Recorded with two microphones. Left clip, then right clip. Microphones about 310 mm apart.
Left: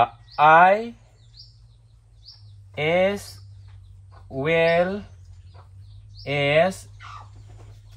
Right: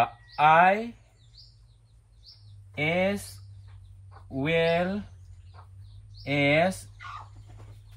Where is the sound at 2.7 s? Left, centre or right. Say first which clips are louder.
Left 6 dB; centre.